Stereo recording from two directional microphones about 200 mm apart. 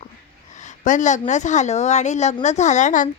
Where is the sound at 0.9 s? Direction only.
40° left (ahead or behind).